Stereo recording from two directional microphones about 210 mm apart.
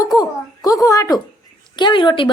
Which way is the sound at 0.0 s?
15° left (ahead or behind).